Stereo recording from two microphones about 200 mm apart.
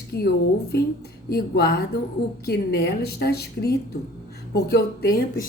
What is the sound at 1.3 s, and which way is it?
A woman's voice, 50° left (ahead or behind).